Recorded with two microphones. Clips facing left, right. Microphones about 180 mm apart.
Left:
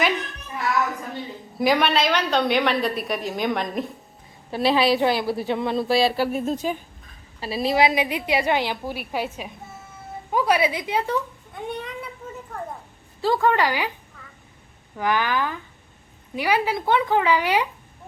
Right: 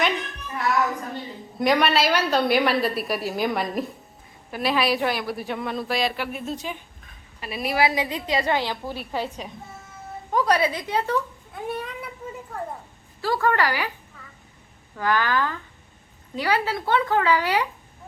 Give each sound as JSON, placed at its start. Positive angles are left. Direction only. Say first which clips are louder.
{"t": 1.5, "sound": "a woman's voice", "louder": "even", "side_deg": 0}
{"t": 4.5, "sound": "a woman's voice", "louder": "left 4 dB", "side_deg": 30}
{"t": 7.3, "sound": "a woman's voice", "louder": "left 3 dB", "side_deg": 30}
{"t": 11.5, "sound": "speech", "louder": "right 1 dB", "side_deg": -5}
{"t": 13.2, "sound": "a woman's voice", "louder": "left 2 dB", "side_deg": 20}
{"t": 14.9, "sound": "a woman's voice", "louder": "even", "side_deg": 15}